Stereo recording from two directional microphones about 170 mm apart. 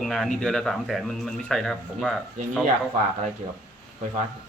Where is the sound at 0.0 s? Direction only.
Centre (ahead or behind).